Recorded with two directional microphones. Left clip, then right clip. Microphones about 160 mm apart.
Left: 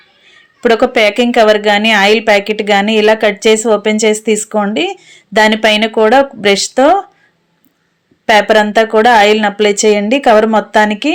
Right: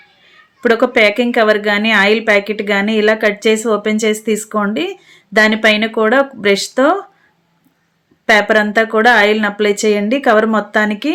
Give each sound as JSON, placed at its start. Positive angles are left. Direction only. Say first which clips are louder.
{"t": 0.6, "sound": "a woman's voice", "louder": "left 2 dB", "side_deg": 15}
{"t": 8.3, "sound": "a woman's voice", "louder": "left 3 dB", "side_deg": 15}